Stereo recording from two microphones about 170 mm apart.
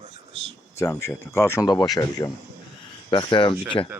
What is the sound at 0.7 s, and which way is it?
Speech, 15° left (ahead or behind).